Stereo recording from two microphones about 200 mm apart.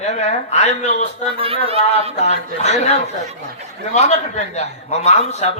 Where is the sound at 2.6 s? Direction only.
35° left (ahead or behind).